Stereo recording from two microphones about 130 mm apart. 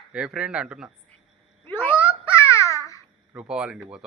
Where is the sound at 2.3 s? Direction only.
20° left (ahead or behind).